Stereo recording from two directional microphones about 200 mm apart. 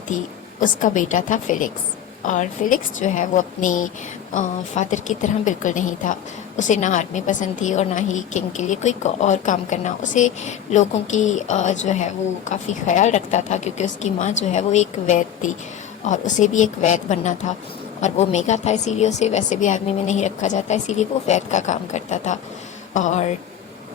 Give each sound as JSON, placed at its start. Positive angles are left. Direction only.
{"t": 0.6, "sound": "a woman's voice", "side_deg": 40}